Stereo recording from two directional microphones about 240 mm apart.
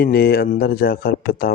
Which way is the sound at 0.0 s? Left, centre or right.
Left.